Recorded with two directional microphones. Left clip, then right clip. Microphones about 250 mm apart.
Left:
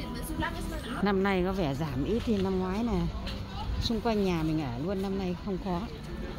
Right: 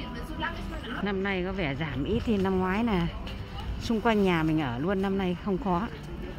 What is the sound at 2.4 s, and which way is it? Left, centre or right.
Speech, centre.